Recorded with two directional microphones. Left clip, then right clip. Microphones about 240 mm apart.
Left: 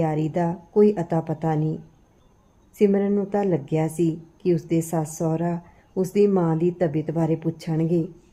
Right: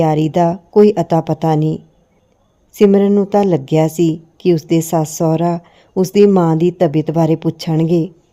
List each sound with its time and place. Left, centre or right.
0.0 s speech: right